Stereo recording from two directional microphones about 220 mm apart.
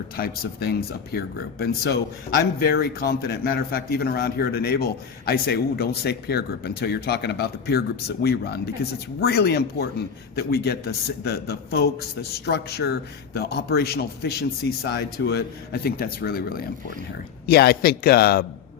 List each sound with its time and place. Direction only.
0.2 s a man's voice: 45° left (ahead or behind)